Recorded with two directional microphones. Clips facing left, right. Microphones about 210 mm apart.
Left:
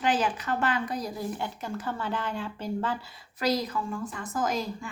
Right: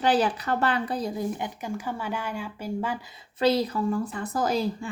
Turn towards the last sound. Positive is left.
turn(degrees=-35)  # may be behind; listen again after turning